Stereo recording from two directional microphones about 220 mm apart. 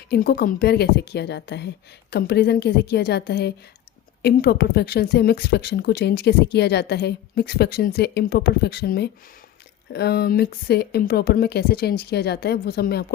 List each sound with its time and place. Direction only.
0.1 s a woman's voice: 45° left (ahead or behind)